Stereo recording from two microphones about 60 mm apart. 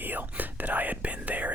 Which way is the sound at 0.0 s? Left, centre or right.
Right.